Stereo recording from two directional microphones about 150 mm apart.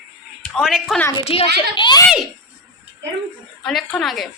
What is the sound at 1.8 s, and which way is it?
Speech, 30° left (ahead or behind).